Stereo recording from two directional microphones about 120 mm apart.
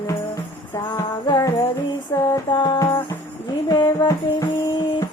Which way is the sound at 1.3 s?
30° left (ahead or behind).